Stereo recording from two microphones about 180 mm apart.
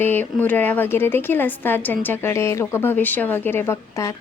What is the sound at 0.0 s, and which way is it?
A woman's voice, 10° left (ahead or behind).